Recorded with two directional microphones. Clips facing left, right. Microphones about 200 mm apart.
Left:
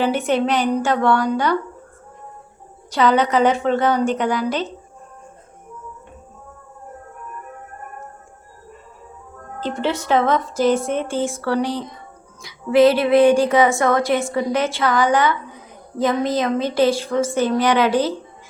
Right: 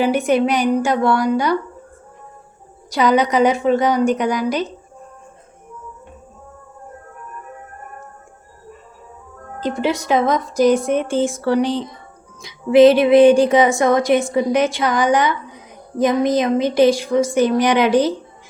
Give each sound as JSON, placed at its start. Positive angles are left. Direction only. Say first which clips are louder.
{"t": 0.0, "sound": "a woman's voice", "louder": "right 3 dB", "side_deg": -10}
{"t": 2.9, "sound": "a woman's voice", "louder": "right 1 dB", "side_deg": -15}
{"t": 9.6, "sound": "a woman's voice", "louder": "right 3 dB", "side_deg": -15}